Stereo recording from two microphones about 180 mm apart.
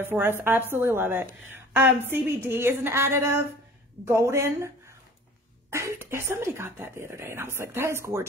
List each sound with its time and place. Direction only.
0.0 s a woman's voice: 10° right (ahead or behind)